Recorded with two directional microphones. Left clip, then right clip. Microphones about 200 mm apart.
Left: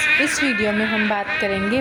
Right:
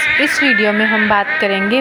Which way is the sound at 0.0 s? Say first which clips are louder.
Right 5 dB; 10° right (ahead or behind).